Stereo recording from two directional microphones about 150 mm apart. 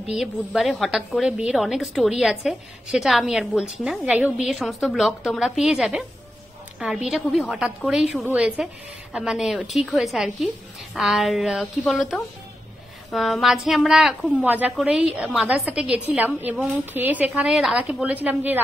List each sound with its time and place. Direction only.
0.1 s a woman's voice: centre (ahead or behind)